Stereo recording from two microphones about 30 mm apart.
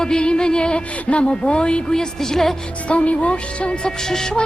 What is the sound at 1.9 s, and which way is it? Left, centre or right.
Speech, centre.